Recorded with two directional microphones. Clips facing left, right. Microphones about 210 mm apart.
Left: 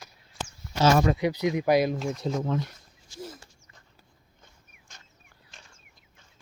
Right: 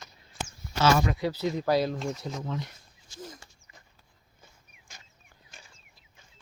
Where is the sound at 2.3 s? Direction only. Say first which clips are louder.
Left 7 dB; 55° left (ahead or behind).